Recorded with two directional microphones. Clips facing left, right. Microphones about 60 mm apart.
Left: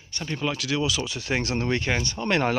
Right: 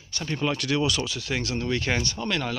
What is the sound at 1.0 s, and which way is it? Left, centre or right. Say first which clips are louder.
Speech: left 2 dB; left.